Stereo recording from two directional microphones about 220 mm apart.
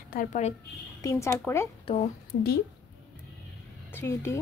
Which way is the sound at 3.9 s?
10° left (ahead or behind).